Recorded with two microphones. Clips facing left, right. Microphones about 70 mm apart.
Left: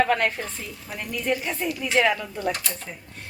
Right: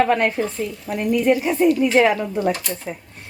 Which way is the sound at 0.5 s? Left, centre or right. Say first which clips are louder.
Right 10 dB; centre.